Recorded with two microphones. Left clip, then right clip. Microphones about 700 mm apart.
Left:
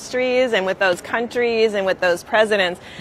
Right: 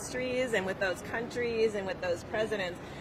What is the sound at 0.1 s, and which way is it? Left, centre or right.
A woman's voice, left.